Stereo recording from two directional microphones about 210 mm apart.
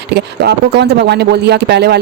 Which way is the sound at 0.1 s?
50° right (ahead or behind).